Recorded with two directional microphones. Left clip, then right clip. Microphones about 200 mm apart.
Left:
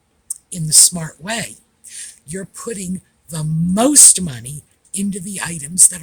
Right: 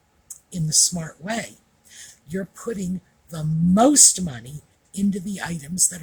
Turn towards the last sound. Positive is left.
turn(degrees=30)  # may be behind; listen again after turning